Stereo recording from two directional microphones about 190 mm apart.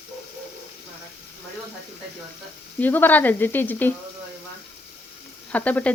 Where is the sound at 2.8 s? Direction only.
10° left (ahead or behind).